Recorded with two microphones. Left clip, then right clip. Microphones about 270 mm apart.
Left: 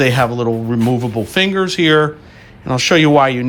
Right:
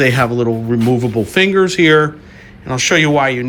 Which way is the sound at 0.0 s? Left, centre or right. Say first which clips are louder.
Right 1 dB; centre.